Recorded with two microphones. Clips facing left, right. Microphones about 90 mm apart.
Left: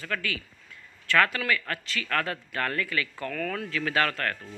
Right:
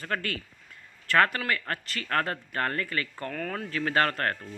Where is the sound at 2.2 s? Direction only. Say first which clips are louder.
Right 1 dB; 45° right (ahead or behind).